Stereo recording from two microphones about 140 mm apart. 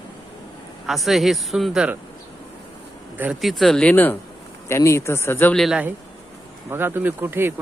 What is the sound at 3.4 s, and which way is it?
A man's voice, centre (ahead or behind).